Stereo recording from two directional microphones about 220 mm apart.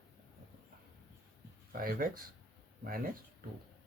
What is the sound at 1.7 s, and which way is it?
Speech, 40° right (ahead or behind).